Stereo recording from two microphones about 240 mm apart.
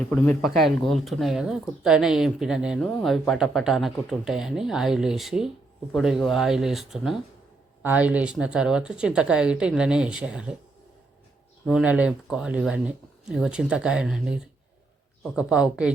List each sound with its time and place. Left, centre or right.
0.0 s speech: centre
11.6 s speech: centre